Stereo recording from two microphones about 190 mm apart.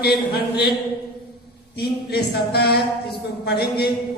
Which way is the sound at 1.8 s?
55° left (ahead or behind).